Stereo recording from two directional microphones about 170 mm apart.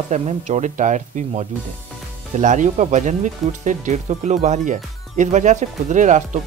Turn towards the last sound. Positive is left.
turn(degrees=-45)  # may be behind; listen again after turning